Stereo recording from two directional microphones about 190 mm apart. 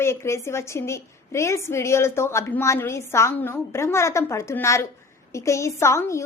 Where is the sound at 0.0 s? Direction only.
15° left (ahead or behind).